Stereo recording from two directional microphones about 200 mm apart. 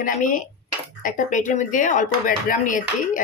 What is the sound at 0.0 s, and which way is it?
Speech, 40° left (ahead or behind).